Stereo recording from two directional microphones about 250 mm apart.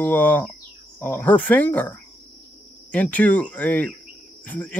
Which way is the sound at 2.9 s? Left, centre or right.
Centre.